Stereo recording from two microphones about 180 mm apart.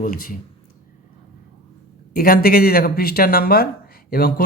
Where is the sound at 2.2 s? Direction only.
55° left (ahead or behind).